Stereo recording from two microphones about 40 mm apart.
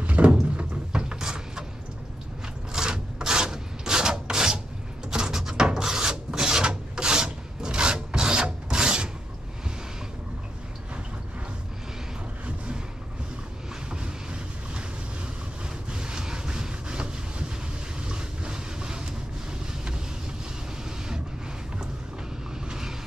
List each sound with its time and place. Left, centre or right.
0.0 s door: right
0.9 s a sound: right
2.7 s rub: centre
5.1 s a sound: centre
5.7 s rub: centre
13.8 s vehicle: right
15.9 s vehicle: right
22.7 s vehicle: centre